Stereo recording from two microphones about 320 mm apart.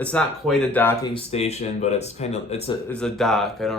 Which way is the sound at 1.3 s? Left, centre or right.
Centre.